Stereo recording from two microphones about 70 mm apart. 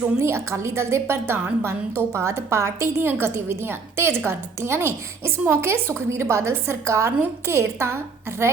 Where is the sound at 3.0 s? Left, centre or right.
Right.